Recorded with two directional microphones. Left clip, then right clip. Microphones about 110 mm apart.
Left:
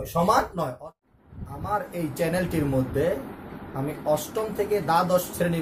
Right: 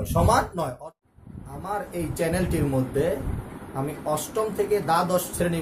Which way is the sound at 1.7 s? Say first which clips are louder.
Left 2 dB; 15° right (ahead or behind).